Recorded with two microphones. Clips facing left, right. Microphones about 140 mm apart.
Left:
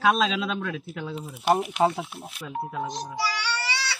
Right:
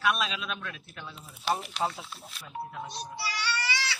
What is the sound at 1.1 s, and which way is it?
Speech, 65° left (ahead or behind).